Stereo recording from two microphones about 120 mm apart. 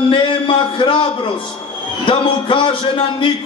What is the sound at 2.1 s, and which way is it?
A man's voice, 45° left (ahead or behind).